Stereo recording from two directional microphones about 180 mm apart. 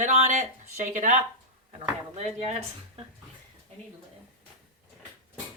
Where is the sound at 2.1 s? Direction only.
35° right (ahead or behind).